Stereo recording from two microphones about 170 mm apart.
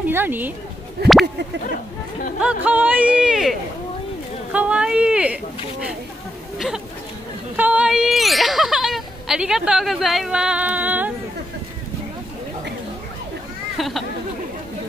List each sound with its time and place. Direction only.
0.1 s speech: 10° right (ahead or behind)
1.0 s a sound: 70° right (ahead or behind)
2.4 s speech: 10° right (ahead or behind)
7.5 s speech: 10° right (ahead or behind)
13.7 s speech: centre (ahead or behind)